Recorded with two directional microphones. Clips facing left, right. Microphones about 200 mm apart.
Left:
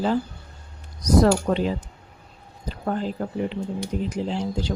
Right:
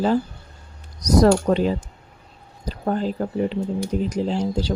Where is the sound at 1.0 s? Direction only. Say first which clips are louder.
Right 2 dB; 40° right (ahead or behind).